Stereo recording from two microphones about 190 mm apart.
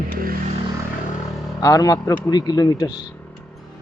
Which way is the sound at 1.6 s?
20° left (ahead or behind).